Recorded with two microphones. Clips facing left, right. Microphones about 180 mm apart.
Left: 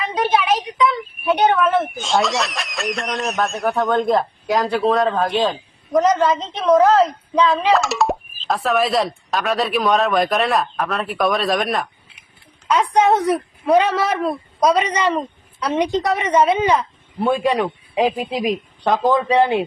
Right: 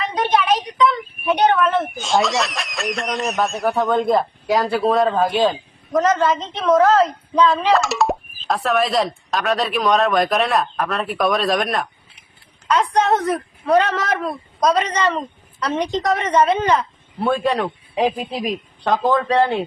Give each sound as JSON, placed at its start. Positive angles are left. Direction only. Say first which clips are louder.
{"t": 0.0, "sound": "a woman's voice", "louder": "even", "side_deg": 5}
{"t": 5.9, "sound": "a woman's voice", "louder": "left 1 dB", "side_deg": 15}
{"t": 7.7, "sound": "speech", "louder": "even", "side_deg": 0}
{"t": 12.6, "sound": "a woman's voice", "louder": "left 2 dB", "side_deg": 10}